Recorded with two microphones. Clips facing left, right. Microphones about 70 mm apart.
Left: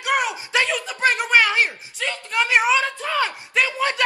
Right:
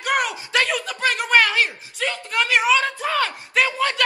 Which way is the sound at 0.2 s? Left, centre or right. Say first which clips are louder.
Even; centre.